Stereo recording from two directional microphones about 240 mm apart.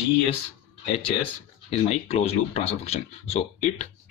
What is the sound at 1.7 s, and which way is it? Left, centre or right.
Speech, left.